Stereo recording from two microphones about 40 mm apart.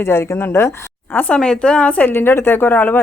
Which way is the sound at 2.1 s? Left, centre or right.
Left.